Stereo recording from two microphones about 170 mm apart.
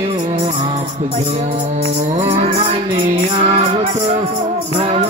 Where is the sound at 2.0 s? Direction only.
35° right (ahead or behind).